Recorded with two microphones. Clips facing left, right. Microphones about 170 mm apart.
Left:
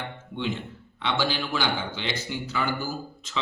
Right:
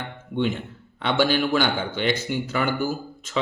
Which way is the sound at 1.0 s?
55° right (ahead or behind).